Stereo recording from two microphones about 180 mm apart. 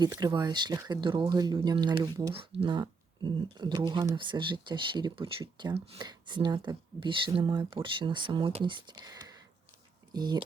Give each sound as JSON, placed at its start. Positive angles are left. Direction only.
{"t": 0.0, "sound": "speech", "side_deg": -20}